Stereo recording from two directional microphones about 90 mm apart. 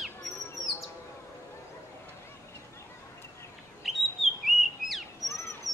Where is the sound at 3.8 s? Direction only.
Centre (ahead or behind).